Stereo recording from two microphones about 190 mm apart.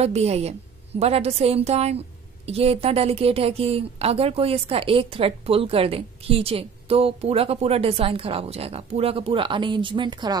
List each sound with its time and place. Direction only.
0.0 s a woman's voice: 35° right (ahead or behind)